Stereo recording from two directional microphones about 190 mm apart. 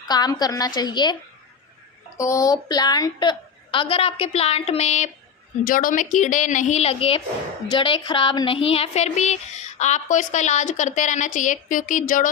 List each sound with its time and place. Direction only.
0.1 s a woman's voice: 20° left (ahead or behind)
2.1 s a woman's voice: 15° left (ahead or behind); by 5.1 s 35° left (ahead or behind)
5.6 s speech: 45° left (ahead or behind)